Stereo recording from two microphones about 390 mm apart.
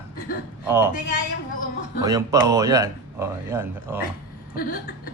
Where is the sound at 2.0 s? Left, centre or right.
Centre.